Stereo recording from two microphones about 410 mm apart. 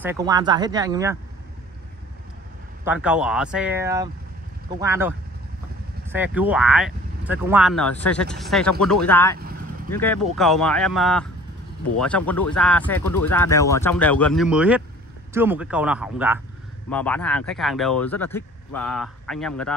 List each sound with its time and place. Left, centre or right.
0.0 s speech: centre
2.8 s speech: centre
6.1 s speech: centre
9.4 s vehicle: right
9.8 s speech: centre
12.3 s speech: centre